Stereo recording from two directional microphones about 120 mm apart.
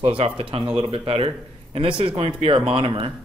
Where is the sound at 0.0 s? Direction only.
50° right (ahead or behind).